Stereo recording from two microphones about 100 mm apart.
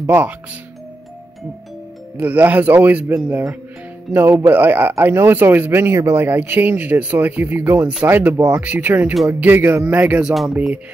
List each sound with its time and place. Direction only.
0.0 s a man's voice: 20° right (ahead or behind)
2.1 s a man's voice: 15° right (ahead or behind)
10.3 s speech: centre (ahead or behind)